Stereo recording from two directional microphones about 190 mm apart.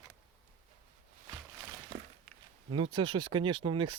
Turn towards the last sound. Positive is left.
turn(degrees=-25)  # may be behind; listen again after turning